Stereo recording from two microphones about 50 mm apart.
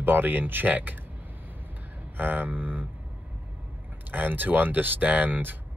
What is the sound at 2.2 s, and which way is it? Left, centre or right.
Speech, right.